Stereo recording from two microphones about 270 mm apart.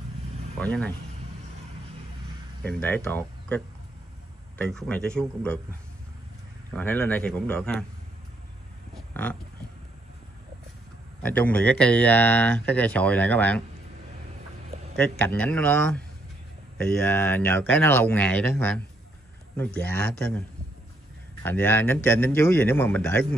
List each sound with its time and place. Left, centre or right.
0.6 s speech: centre
2.6 s speech: centre
6.7 s speech: centre
8.9 s a sound: centre
11.2 s speech: centre
15.0 s speech: centre